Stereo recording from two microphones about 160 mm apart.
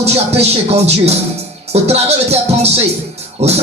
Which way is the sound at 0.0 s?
40° right (ahead or behind).